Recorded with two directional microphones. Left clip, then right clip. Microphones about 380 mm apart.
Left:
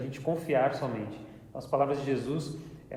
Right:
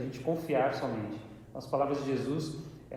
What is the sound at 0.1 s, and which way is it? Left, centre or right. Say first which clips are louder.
Speech: left 3 dB; left.